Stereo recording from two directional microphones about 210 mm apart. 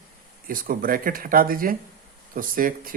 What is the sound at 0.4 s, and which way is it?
Speech, 40° right (ahead or behind).